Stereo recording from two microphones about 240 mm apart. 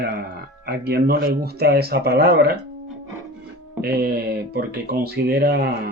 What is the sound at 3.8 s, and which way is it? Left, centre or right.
Speech, right.